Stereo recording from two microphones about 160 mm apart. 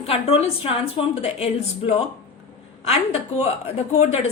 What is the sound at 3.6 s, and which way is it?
Speech, 40° left (ahead or behind).